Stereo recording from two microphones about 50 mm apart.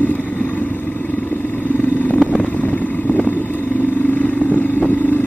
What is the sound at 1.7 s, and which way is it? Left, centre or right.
Vehicle, left.